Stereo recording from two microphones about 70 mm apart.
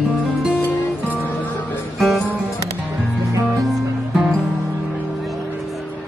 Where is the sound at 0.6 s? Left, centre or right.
Left.